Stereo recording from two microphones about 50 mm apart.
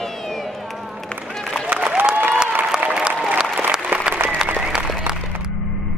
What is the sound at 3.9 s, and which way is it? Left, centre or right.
Applause, right.